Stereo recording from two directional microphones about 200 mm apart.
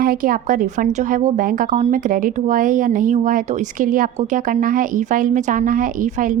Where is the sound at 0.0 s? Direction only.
45° right (ahead or behind).